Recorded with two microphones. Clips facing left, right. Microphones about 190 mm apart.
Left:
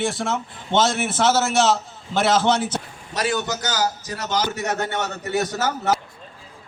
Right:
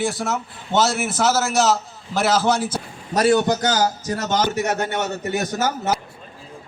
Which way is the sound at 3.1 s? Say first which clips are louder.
Right 7 dB; 35° right (ahead or behind).